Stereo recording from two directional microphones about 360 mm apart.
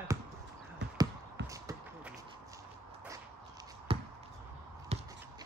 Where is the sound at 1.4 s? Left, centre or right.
Centre.